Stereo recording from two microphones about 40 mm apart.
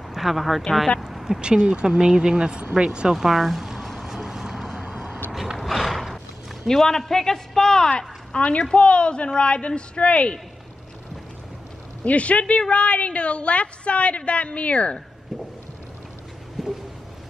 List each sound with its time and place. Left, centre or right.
0.1 s speech: centre
1.4 s speech: right
3.2 s speech: centre
4.0 s vehicle: centre
4.7 s a sound: right
5.3 s mechanisms: centre
6.7 s a man's voice: centre
8.3 s a man's voice: left
12.0 s a woman's voice: left
16.6 s a sound: centre